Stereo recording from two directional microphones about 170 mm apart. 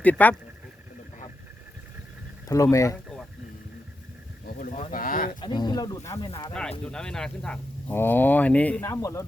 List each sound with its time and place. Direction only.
0.0 s speech: 10° left (ahead or behind)
2.5 s speech: 20° left (ahead or behind)
4.4 s speech: 50° left (ahead or behind)
5.4 s speech: 25° left (ahead or behind)
6.5 s speech: 5° left (ahead or behind)